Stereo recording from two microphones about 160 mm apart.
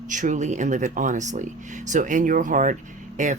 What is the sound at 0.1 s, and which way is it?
Speech, 50° right (ahead or behind).